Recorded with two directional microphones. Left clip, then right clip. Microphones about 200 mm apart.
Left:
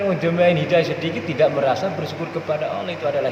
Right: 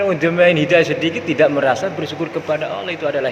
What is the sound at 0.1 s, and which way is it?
A man's voice, 30° right (ahead or behind).